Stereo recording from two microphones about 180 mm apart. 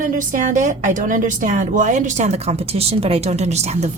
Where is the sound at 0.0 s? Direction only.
45° right (ahead or behind).